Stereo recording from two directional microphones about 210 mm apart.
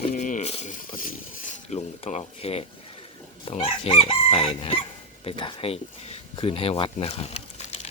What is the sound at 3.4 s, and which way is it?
Crowing, 25° left (ahead or behind).